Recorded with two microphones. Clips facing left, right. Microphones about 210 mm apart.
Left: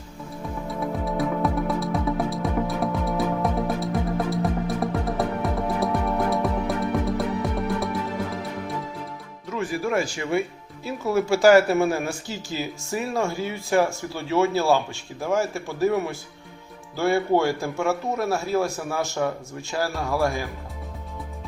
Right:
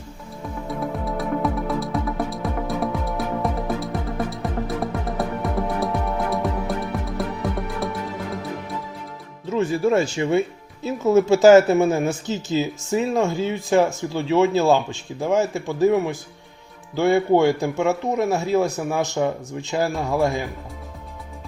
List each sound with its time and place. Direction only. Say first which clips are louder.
0.7 s music: right 1 dB; centre (ahead or behind)
9.5 s speech: right 6 dB; 25° right (ahead or behind)